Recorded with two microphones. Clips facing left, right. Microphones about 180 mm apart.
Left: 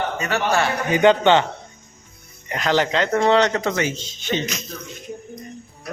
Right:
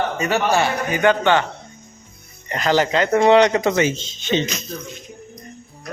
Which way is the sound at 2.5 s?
Centre (ahead or behind).